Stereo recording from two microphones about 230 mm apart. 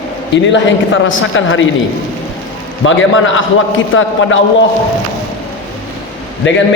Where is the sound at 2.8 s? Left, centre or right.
Left.